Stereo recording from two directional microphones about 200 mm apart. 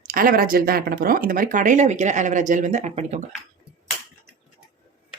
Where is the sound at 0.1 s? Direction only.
45° right (ahead or behind).